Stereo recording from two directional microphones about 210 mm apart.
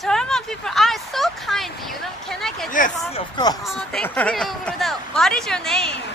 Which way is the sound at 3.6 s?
Centre (ahead or behind).